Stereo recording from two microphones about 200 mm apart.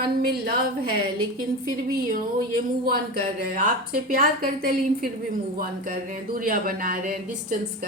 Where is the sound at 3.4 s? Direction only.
40° right (ahead or behind).